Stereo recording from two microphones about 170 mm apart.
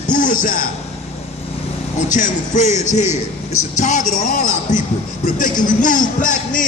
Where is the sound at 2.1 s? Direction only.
45° left (ahead or behind).